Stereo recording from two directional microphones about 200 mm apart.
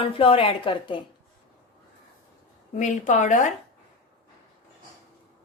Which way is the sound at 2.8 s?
35° left (ahead or behind).